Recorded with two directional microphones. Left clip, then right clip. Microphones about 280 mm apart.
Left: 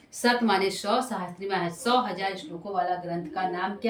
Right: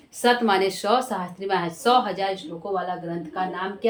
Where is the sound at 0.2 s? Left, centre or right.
Centre.